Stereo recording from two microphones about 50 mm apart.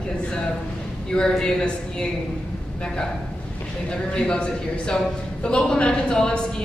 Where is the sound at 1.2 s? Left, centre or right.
Centre.